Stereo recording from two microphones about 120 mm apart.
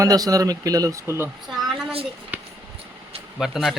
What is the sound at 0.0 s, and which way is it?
Speech, 30° right (ahead or behind).